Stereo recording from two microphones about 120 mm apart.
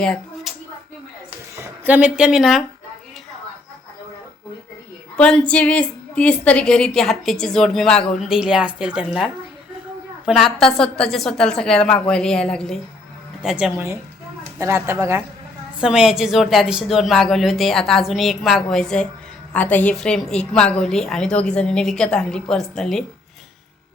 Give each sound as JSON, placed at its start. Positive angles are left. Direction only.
{"t": 0.0, "sound": "a sound", "side_deg": 5}
{"t": 1.5, "sound": "a woman's voice", "side_deg": -20}
{"t": 5.1, "sound": "a woman's voice", "side_deg": 5}
{"t": 13.4, "sound": "a woman's voice", "side_deg": -5}
{"t": 14.6, "sound": "speech", "side_deg": -20}
{"t": 15.8, "sound": "a woman's voice", "side_deg": -5}